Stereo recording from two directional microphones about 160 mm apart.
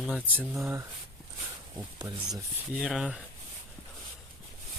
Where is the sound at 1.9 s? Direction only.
20° right (ahead or behind).